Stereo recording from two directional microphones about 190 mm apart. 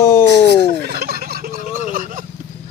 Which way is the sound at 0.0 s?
15° left (ahead or behind).